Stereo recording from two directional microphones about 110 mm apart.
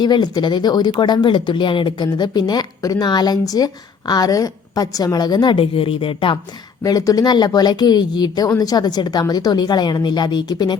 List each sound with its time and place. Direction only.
0.0 s speech: 40° left (ahead or behind)
6.8 s speech: 35° left (ahead or behind)